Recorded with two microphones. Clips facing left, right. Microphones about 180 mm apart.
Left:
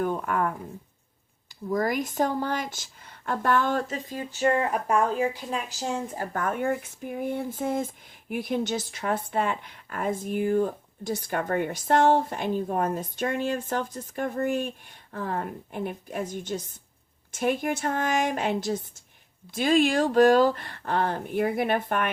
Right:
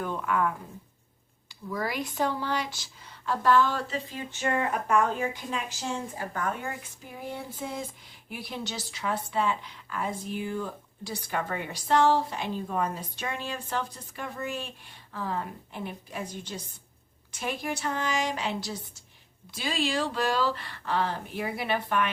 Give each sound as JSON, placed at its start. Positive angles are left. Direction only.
{"t": 0.0, "sound": "speech", "side_deg": 45}
{"t": 1.7, "sound": "a woman's voice", "side_deg": 45}